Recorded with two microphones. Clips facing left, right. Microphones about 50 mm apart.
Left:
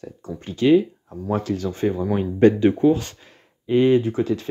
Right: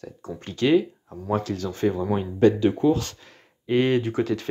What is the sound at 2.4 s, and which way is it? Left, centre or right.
Speech, left.